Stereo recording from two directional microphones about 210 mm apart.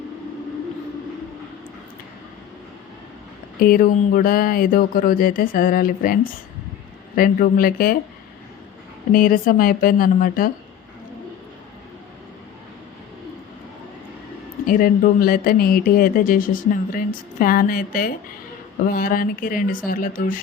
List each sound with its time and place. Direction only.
3.6 s speech: 45° left (ahead or behind)
9.1 s speech: 45° left (ahead or behind)
14.7 s speech: 45° left (ahead or behind)